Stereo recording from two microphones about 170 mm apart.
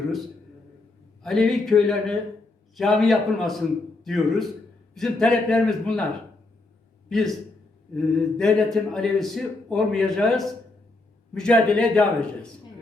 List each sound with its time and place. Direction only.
1.2 s speech: 5° left (ahead or behind)
7.1 s speech: centre (ahead or behind)